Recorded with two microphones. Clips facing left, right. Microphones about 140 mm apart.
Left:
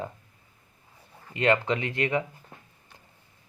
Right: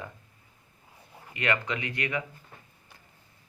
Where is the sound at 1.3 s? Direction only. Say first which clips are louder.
Left 6 dB; 30° left (ahead or behind).